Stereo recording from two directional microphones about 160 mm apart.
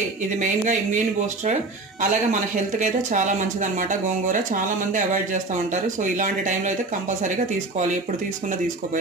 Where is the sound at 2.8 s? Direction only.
50° right (ahead or behind).